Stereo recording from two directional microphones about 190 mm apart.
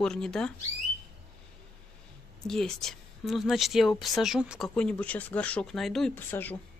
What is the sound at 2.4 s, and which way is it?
Speech, centre (ahead or behind).